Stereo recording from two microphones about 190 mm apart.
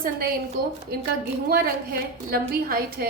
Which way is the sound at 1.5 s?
50° right (ahead or behind).